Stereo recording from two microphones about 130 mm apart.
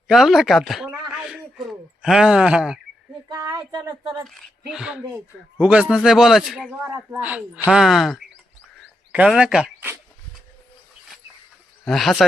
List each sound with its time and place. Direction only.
0.1 s a sound: centre (ahead or behind)
3.2 s speech: 25° right (ahead or behind)
4.3 s a man's voice: centre (ahead or behind)
6.8 s a man's voice: 20° right (ahead or behind); by 9.6 s 5° right (ahead or behind)
11.9 s a man's voice: centre (ahead or behind)